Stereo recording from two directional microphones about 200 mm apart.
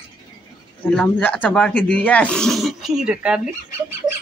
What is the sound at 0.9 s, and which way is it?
Speech, 5° left (ahead or behind).